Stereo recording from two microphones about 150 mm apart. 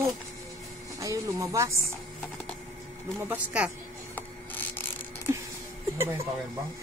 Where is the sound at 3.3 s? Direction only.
10° right (ahead or behind).